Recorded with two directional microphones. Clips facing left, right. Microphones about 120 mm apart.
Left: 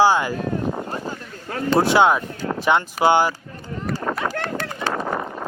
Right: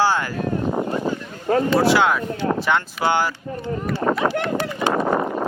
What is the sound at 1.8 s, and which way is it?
Speech, 20° left (ahead or behind).